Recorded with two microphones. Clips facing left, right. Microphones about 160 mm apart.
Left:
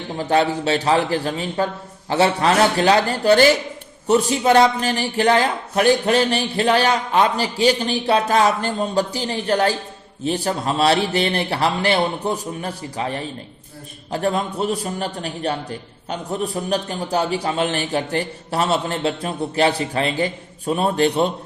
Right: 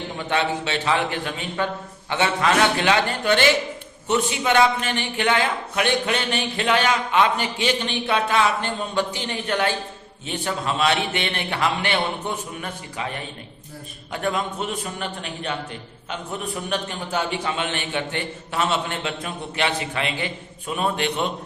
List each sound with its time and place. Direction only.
0.2 s a man's voice: 40° left (ahead or behind)